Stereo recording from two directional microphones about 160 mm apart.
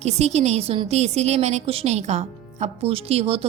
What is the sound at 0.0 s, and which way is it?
A woman's voice, 45° right (ahead or behind).